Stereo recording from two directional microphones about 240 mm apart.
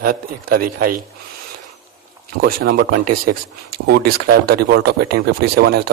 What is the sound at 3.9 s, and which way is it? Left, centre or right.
A man's voice, right.